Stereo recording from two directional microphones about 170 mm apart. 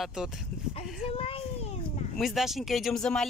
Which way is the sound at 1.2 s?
35° left (ahead or behind).